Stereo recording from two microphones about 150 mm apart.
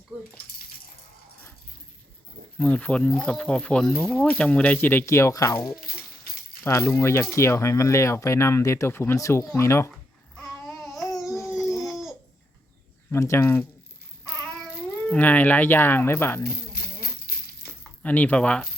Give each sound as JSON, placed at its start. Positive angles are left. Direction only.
{"t": 2.6, "sound": "speech", "side_deg": 10}
{"t": 10.3, "sound": "babbling", "side_deg": 0}
{"t": 11.4, "sound": "dog", "side_deg": -5}
{"t": 13.1, "sound": "speech", "side_deg": 20}
{"t": 14.4, "sound": "speech", "side_deg": 5}
{"t": 17.8, "sound": "speech", "side_deg": 10}